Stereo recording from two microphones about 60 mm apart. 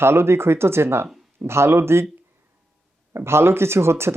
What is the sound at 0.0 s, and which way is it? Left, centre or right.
Speech, right.